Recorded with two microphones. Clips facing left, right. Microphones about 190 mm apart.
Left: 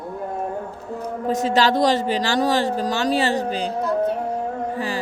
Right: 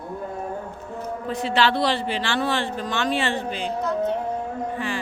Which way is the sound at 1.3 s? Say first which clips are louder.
Left 3 dB; 40° left (ahead or behind).